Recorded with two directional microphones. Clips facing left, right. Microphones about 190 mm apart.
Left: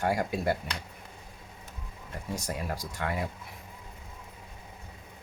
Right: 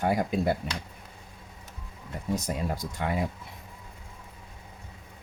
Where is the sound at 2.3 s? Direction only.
20° right (ahead or behind).